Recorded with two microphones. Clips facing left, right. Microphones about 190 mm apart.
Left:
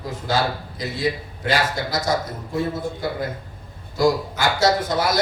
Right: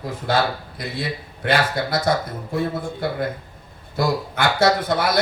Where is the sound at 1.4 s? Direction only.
60° right (ahead or behind).